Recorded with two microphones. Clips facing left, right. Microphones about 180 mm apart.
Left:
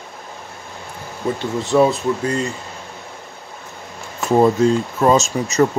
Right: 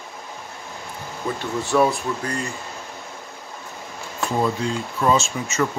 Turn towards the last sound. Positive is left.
turn(degrees=40)  # may be behind; listen again after turning